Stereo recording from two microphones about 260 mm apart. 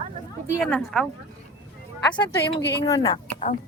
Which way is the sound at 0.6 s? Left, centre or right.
Centre.